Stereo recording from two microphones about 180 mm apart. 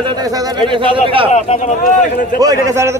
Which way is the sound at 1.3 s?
40° left (ahead or behind).